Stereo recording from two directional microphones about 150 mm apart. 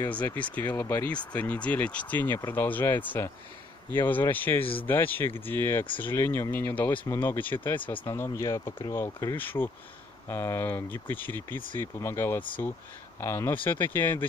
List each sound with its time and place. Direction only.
0.1 s speech: 10° left (ahead or behind)